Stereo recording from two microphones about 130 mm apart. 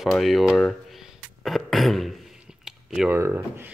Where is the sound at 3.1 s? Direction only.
15° right (ahead or behind).